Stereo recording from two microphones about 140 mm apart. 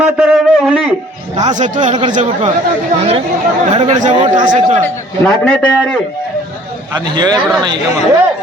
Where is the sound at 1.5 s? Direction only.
60° right (ahead or behind).